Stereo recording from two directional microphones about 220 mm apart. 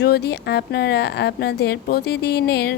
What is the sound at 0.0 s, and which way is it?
A woman's voice, 50° left (ahead or behind).